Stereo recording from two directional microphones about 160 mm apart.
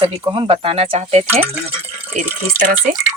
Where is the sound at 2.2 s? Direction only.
15° right (ahead or behind).